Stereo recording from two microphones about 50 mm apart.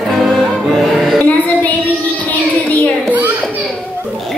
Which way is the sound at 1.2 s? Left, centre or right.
Left.